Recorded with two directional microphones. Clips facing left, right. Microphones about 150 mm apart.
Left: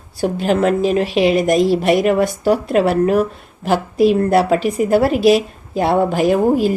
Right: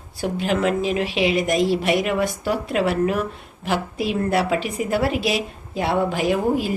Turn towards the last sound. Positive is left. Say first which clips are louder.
# left 6 dB
turn(degrees=45)  # may be behind; listen again after turning